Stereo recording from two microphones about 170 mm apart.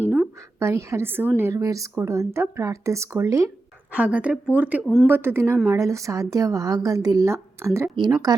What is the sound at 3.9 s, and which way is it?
A woman's voice, 5° right (ahead or behind).